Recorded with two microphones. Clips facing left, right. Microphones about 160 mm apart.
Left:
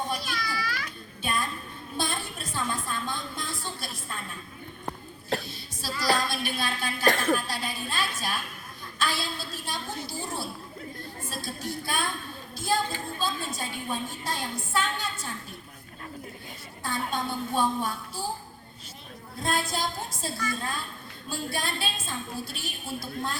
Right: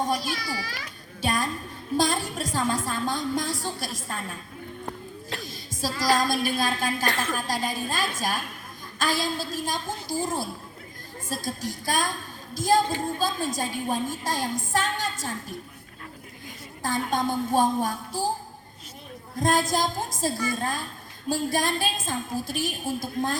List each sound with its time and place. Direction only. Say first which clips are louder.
0.0 s children playing: right 5 dB; 40° right (ahead or behind)
2.0 s a sound: right 7 dB; 40° right (ahead or behind)
2.5 s a woman's voice: right 4 dB; 40° right (ahead or behind)
5.4 s a woman's voice: right 8 dB; 45° right (ahead or behind)
16.8 s a woman's voice: right 5 dB; 45° right (ahead or behind)
19.4 s a woman's voice: right 6 dB; 45° right (ahead or behind)